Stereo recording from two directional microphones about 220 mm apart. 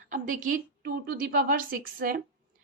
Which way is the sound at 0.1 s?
35° right (ahead or behind).